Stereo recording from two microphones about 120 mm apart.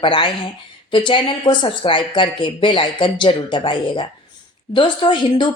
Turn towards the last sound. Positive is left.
turn(degrees=40)  # may be behind; listen again after turning